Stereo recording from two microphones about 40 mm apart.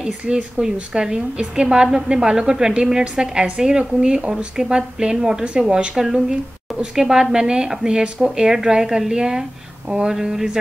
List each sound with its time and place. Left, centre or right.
0.2 s a woman's voice: right
5.4 s a woman's voice: right
5.9 s a woman's voice: centre